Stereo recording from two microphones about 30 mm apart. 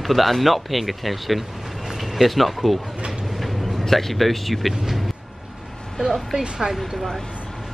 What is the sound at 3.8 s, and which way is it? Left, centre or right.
Speech, centre.